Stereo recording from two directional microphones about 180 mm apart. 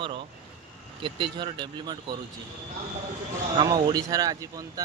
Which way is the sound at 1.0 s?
25° right (ahead or behind).